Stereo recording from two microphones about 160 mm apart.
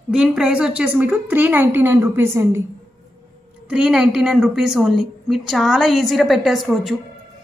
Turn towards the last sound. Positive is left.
turn(degrees=0)  # may be behind; listen again after turning